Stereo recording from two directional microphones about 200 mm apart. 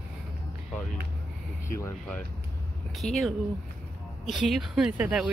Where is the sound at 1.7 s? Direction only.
15° left (ahead or behind).